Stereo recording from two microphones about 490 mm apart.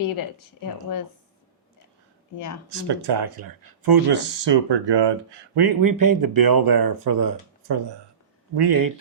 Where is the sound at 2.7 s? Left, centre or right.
Right.